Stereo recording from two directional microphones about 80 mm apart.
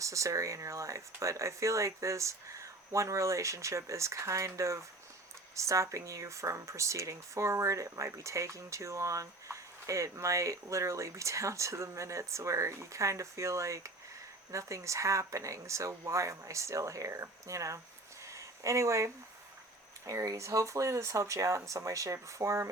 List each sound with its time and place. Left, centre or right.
0.0 s speech: right
18.3 s a sound: right
20.1 s speech: right